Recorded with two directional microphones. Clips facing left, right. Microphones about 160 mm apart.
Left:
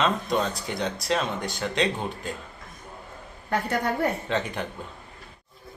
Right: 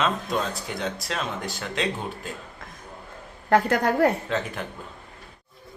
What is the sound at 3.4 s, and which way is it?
Speech, 85° right.